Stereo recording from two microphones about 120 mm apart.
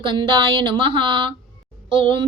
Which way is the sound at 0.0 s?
40° right (ahead or behind).